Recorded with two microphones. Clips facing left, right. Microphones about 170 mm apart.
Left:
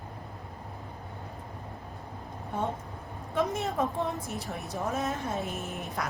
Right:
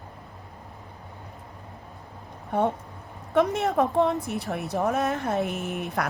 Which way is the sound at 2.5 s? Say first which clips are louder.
Right 8 dB; 65° right (ahead or behind).